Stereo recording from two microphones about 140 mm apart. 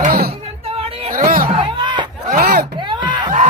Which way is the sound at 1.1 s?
85° right.